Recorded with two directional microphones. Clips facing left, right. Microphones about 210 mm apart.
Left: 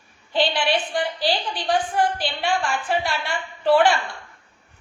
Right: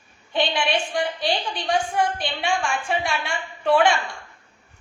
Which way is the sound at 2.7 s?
5° left (ahead or behind).